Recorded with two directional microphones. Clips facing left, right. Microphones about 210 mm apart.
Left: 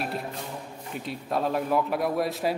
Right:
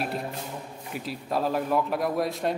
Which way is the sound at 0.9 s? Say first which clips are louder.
Even; centre (ahead or behind).